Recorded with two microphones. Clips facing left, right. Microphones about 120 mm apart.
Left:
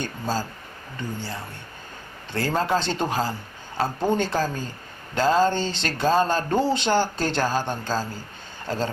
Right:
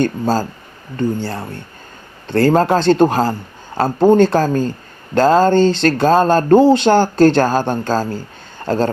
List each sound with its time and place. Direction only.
0.0 s speech: 65° right (ahead or behind)
3.8 s speech: 80° right